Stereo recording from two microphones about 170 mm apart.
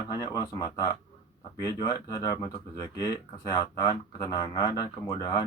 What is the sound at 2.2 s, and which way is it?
Speech, 20° left (ahead or behind).